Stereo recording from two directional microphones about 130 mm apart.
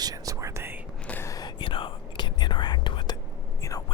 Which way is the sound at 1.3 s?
35° left (ahead or behind).